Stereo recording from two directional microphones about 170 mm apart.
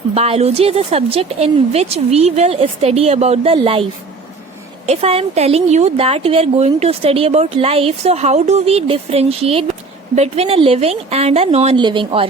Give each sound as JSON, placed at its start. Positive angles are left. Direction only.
{"t": 0.1, "sound": "a woman's voice", "side_deg": -35}
{"t": 4.9, "sound": "a woman's voice", "side_deg": -35}